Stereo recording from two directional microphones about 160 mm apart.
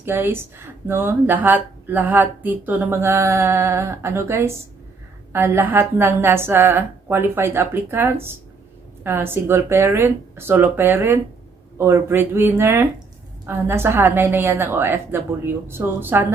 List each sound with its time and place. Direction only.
0.0 s a woman's voice: 15° right (ahead or behind)